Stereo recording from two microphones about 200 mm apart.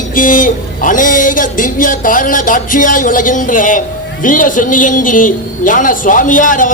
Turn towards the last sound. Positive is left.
turn(degrees=40)  # may be behind; listen again after turning